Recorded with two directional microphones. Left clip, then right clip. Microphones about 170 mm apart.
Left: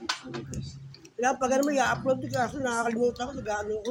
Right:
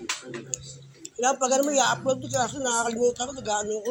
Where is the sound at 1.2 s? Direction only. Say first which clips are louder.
Right 2 dB; 25° left (ahead or behind).